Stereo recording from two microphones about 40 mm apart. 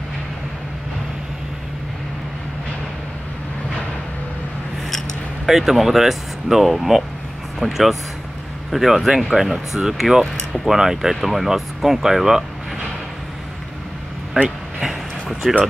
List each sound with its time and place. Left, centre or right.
5.5 s speech: centre
14.3 s speech: right
14.8 s train: centre